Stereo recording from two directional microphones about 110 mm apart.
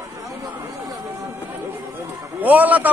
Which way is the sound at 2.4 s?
15° right (ahead or behind).